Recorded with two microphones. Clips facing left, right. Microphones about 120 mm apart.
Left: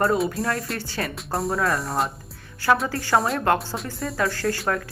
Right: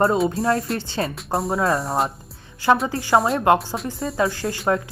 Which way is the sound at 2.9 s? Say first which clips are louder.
Right 3 dB; 20° right (ahead or behind).